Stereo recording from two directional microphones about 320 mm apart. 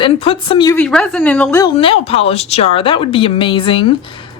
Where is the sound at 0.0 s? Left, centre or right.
Centre.